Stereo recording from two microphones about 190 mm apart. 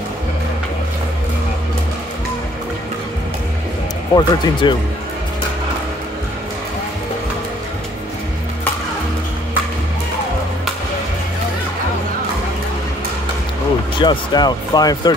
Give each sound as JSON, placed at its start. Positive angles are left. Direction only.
{"t": 4.1, "sound": "speech", "side_deg": 25}
{"t": 13.9, "sound": "speech", "side_deg": 25}